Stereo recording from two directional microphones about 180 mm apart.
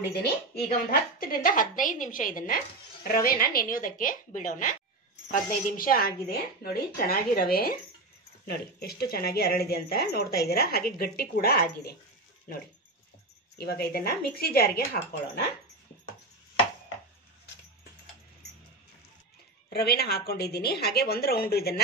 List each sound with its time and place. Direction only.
0.1 s a woman's voice: 60° left (ahead or behind)
13.6 s speech: 60° left (ahead or behind)
19.7 s speech: 65° left (ahead or behind)